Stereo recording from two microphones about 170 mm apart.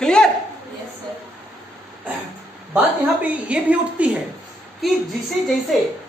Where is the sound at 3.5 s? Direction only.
10° right (ahead or behind).